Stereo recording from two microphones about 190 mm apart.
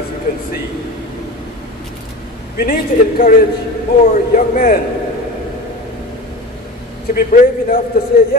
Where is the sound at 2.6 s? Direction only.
50° left (ahead or behind).